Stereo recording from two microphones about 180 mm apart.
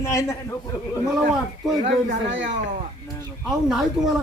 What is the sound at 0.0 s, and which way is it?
Speech, 15° left (ahead or behind).